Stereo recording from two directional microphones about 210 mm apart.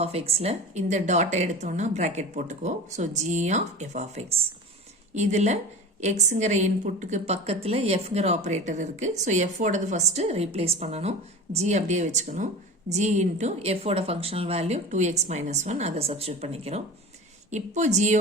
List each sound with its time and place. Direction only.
0.0 s a woman's voice: 30° right (ahead or behind)